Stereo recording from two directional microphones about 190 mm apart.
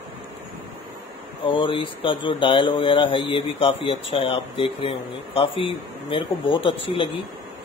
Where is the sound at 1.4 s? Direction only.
25° left (ahead or behind).